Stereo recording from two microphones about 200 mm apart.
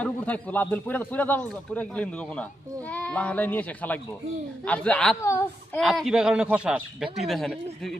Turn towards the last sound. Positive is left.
turn(degrees=0)  # may be behind; listen again after turning